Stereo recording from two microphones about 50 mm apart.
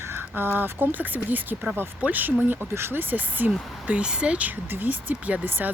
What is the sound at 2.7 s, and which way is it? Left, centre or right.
Speech, right.